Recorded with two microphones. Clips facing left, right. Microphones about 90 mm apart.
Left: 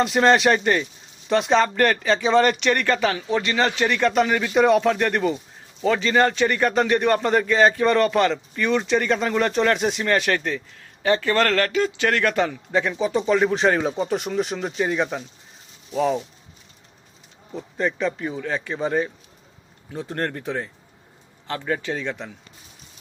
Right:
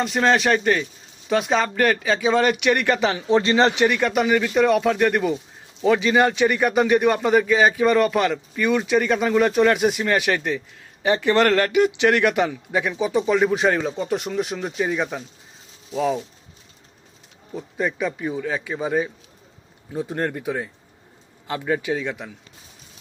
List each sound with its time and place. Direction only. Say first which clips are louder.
0.0 s speech: left 2 dB; centre (ahead or behind); by 3.2 s 20° right (ahead or behind)
3.2 s speech: right 4 dB; 30° right (ahead or behind)
3.8 s a man's voice: even; 10° right (ahead or behind)
4.4 s a man's voice: left 1 dB; 5° left (ahead or behind)
13.8 s speech: left 2 dB; 15° left (ahead or behind)
14.1 s speech: even; centre (ahead or behind)
17.5 s a man's voice: even; 5° right (ahead or behind)